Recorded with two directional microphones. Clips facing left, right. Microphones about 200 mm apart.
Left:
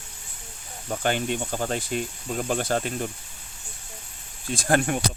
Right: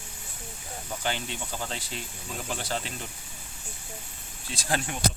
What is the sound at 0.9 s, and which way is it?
Speech, 50° left (ahead or behind).